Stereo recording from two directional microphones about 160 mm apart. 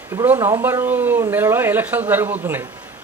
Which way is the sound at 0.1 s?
15° right (ahead or behind).